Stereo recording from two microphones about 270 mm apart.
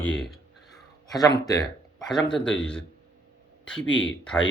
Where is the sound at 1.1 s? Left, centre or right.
Centre.